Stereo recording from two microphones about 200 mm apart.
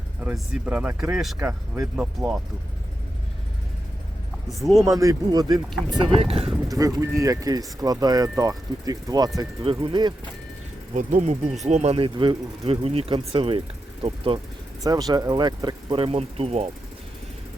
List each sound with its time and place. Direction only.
0.2 s speech: 5° right (ahead or behind)
4.5 s speech: centre (ahead or behind)
4.9 s speech: 15° right (ahead or behind)
6.7 s speech: 15° right (ahead or behind)
10.9 s speech: 35° right (ahead or behind)